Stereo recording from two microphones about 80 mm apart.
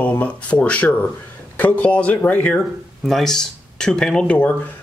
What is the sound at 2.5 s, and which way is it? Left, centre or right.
Speech, centre.